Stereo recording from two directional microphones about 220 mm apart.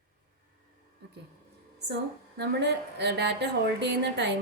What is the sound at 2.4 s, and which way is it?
A woman's voice, 50° right (ahead or behind).